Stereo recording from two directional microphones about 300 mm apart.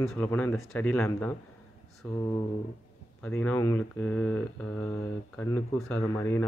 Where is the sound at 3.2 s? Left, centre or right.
Centre.